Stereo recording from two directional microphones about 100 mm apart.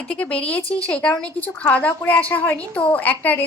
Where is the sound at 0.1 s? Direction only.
15° left (ahead or behind).